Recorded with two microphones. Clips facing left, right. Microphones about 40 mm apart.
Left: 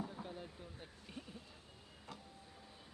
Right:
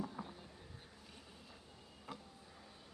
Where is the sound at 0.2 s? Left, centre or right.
Centre.